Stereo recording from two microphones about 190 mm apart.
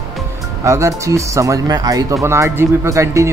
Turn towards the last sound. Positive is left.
turn(degrees=-15)  # may be behind; listen again after turning